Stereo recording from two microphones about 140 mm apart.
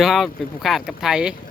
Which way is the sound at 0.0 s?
Centre (ahead or behind).